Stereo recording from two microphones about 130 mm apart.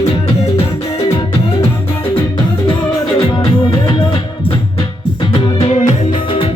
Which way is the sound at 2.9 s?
35° left (ahead or behind).